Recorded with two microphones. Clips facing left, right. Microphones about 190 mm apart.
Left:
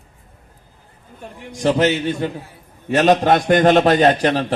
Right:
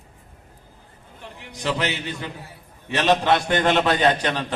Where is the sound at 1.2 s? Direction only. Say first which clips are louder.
Left 8 dB; 45° left (ahead or behind).